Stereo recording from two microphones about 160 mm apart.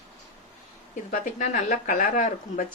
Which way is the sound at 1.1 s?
50° left (ahead or behind).